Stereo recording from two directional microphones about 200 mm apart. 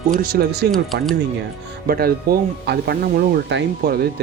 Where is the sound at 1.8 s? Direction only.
50° right (ahead or behind).